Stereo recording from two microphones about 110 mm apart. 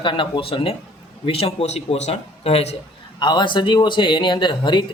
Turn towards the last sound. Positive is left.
turn(degrees=45)  # may be behind; listen again after turning